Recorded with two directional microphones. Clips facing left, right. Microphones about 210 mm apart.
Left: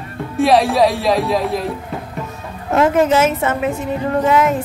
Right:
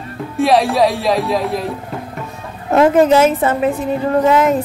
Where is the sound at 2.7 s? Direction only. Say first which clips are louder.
Right 3 dB; 35° right (ahead or behind).